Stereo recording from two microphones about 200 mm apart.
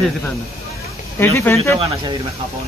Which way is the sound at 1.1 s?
10° left (ahead or behind).